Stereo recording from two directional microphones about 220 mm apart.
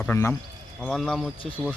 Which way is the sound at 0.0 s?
10° left (ahead or behind).